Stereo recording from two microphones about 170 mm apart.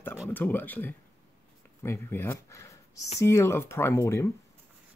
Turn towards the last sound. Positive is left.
turn(degrees=15)  # may be behind; listen again after turning